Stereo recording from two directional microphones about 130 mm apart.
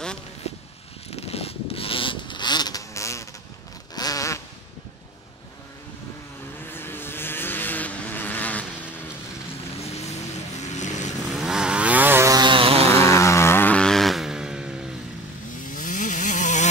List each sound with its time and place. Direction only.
0.5 s a sound: 55° left (ahead or behind)
1.1 s vehicle: 50° left (ahead or behind); by 3.3 s 25° left (ahead or behind)
3.9 s zipper: 30° left (ahead or behind)
6.6 s vehicle: 15° left (ahead or behind)
9.8 s vehicle: 55° left (ahead or behind)
11.2 s vehicle: 5° right (ahead or behind)
12.3 s vehicle: 35° right (ahead or behind)
13.0 s vehicle: 20° left (ahead or behind); by 15.0 s 5° right (ahead or behind)
15.6 s chainsaw: 90° left; by 16.6 s 70° left (ahead or behind)